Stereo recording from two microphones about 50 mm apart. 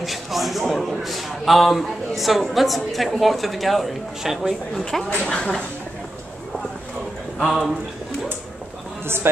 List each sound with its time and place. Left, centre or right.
0.0 s a man's voice: centre
5.3 s speech: centre
7.4 s a man's voice: centre
9.0 s a man's voice: right